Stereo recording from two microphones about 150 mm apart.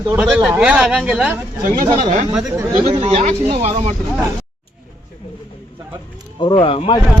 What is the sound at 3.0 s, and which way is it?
Speech, 45° right (ahead or behind).